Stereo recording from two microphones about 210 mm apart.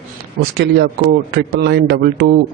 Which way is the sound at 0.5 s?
50° right (ahead or behind).